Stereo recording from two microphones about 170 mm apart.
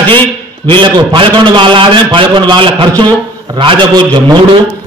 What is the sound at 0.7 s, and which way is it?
A man's voice, 30° right (ahead or behind).